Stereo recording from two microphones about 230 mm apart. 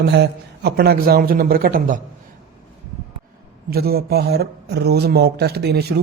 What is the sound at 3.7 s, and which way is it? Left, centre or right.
Speech, right.